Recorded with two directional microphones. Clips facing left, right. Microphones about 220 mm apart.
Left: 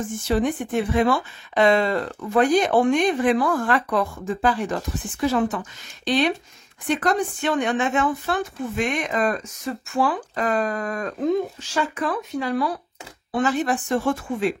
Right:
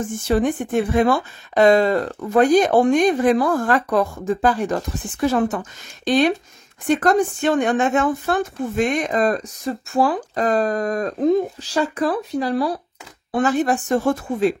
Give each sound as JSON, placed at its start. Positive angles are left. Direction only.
{"t": 0.3, "sound": "a woman's voice", "side_deg": -50}
{"t": 13.3, "sound": "a woman's voice", "side_deg": -50}